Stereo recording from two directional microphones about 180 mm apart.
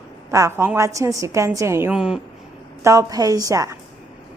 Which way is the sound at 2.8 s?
15° right (ahead or behind).